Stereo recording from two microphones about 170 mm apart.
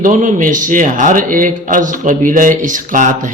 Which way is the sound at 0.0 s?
50° right (ahead or behind).